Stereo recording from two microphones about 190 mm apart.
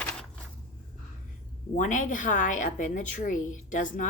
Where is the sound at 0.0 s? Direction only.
5° left (ahead or behind).